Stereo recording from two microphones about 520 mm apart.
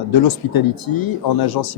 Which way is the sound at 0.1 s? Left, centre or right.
Left.